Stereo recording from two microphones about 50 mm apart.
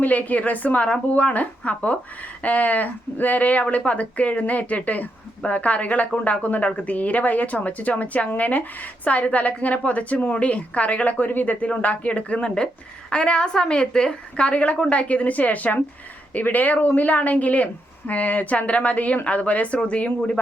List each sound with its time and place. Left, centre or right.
0.0 s a woman's voice: left